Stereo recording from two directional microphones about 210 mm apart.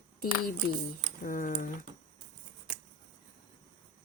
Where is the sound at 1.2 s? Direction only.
40° left (ahead or behind).